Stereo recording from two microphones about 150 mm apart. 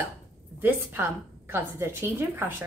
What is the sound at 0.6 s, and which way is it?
A woman's voice, 15° right (ahead or behind).